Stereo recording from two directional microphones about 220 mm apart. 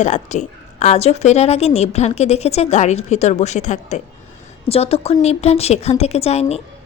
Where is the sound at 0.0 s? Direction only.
35° left (ahead or behind).